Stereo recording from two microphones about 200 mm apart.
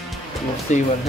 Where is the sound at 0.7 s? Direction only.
35° left (ahead or behind).